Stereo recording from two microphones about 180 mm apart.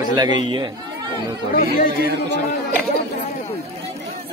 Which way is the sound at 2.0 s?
60° right (ahead or behind).